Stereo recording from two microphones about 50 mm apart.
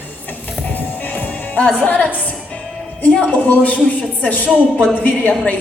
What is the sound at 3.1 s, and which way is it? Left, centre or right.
A woman's voice, left.